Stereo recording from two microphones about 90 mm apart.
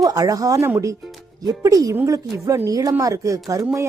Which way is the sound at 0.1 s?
40° right (ahead or behind).